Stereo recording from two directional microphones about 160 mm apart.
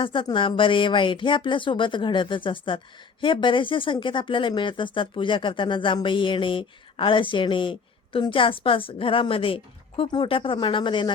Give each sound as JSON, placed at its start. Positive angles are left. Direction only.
{"t": 0.0, "sound": "speech", "side_deg": 30}